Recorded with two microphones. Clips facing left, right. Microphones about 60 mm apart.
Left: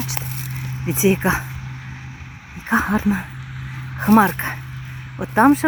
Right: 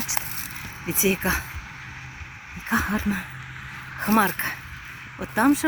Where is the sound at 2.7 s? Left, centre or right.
Left.